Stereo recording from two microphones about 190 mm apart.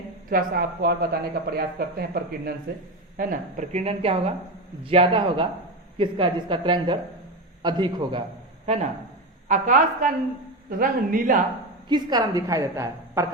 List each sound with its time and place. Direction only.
0.3 s a woman's voice: 50° right (ahead or behind); by 8.2 s 25° right (ahead or behind)
8.6 s speech: 35° right (ahead or behind)
11.9 s a woman's voice: 20° right (ahead or behind)